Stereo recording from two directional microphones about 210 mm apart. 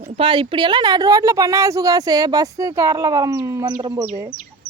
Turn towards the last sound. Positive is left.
turn(degrees=-15)  # may be behind; listen again after turning